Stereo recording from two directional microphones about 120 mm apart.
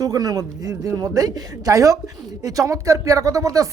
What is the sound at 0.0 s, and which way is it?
A man's voice, 30° right (ahead or behind).